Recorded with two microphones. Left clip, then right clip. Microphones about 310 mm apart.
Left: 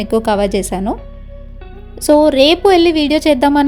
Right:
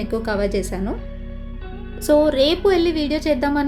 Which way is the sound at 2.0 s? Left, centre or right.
Centre.